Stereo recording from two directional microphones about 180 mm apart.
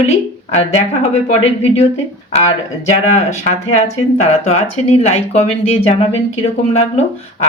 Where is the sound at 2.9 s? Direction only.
40° left (ahead or behind).